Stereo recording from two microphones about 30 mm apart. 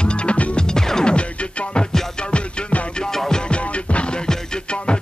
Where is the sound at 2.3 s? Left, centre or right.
Left.